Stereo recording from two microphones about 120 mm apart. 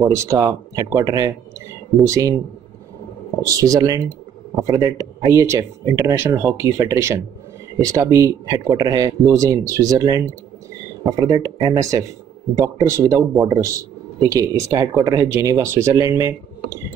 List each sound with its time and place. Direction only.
0.0 s a man's voice: 25° right (ahead or behind)
3.5 s a man's voice: 30° right (ahead or behind)